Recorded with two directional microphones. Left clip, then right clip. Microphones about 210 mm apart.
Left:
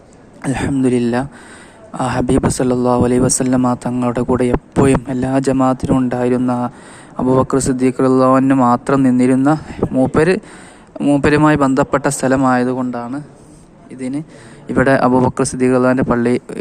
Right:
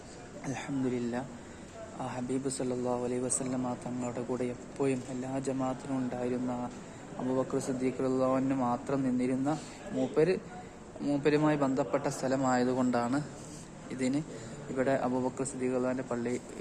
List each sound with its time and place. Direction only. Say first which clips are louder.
0.4 s a man's voice: left 18 dB; 30° left (ahead or behind); by 14.1 s 10° left (ahead or behind)
14.8 s speech: left 18 dB; 35° left (ahead or behind)